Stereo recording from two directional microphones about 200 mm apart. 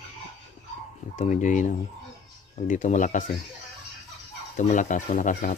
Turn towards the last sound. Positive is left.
turn(degrees=40)  # may be behind; listen again after turning